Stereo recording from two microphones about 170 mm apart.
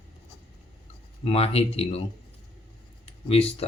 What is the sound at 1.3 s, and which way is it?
Speech, 35° left (ahead or behind).